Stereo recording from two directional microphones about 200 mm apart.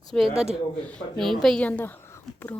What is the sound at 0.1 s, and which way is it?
A woman's voice, 5° left (ahead or behind).